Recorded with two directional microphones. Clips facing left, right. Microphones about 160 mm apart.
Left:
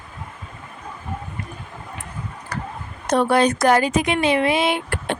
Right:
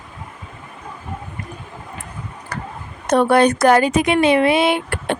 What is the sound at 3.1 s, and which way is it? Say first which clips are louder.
Speech: right 3 dB; 60° right (ahead or behind).